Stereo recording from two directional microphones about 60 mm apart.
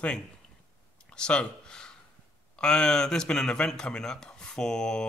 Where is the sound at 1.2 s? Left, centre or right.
Centre.